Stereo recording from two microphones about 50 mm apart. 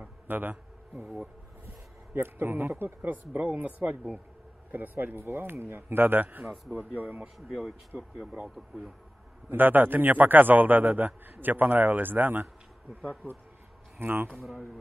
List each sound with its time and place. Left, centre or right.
0.3 s speech: right
2.1 s a man's voice: right
6.4 s speech: centre
6.7 s a man's voice: right
7.3 s speech: centre
7.9 s speech: right
8.4 s speech: centre
9.5 s a man's voice: right
13.0 s a man's voice: left
13.9 s a man's voice: right
14.3 s speech: centre